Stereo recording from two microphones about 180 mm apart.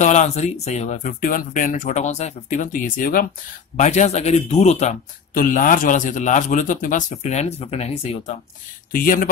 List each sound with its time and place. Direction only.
0.0 s a man's voice: 40° left (ahead or behind)
8.9 s speech: 50° left (ahead or behind)